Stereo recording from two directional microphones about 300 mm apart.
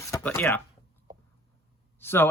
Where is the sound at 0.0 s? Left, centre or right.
Centre.